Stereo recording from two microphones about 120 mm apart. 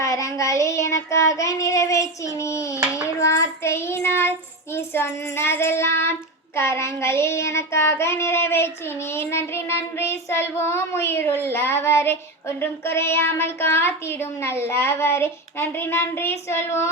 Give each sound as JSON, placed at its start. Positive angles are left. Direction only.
{"t": 0.0, "sound": "child singing", "side_deg": 25}